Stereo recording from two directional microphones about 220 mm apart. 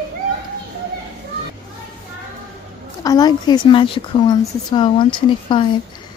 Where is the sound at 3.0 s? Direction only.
15° left (ahead or behind).